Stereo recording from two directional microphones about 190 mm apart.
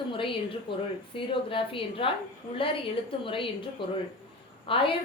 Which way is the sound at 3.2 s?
25° left (ahead or behind).